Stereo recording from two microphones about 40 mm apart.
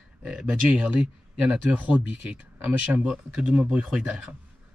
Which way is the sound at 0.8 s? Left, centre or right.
Right.